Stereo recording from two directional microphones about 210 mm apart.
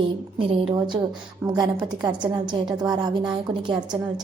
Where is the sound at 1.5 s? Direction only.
20° right (ahead or behind).